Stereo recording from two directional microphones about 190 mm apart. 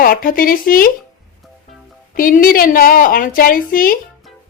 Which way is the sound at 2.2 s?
45° left (ahead or behind).